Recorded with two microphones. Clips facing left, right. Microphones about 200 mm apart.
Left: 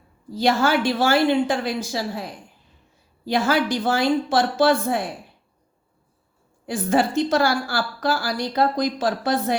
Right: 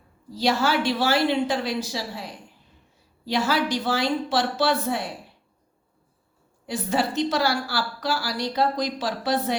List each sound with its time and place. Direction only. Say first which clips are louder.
0.3 s a woman's voice: left 3 dB; 50° left (ahead or behind)
6.7 s a woman's voice: left 4 dB; 50° left (ahead or behind)